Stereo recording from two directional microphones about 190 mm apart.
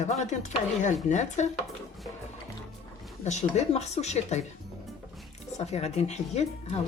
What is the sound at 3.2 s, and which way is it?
Speech, 35° left (ahead or behind).